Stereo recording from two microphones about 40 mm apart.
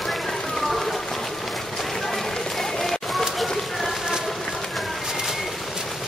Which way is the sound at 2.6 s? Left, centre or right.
Centre.